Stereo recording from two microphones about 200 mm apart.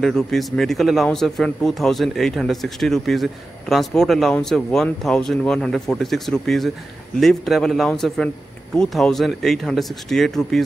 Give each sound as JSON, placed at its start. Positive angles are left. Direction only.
{"t": 0.0, "sound": "speech", "side_deg": 0}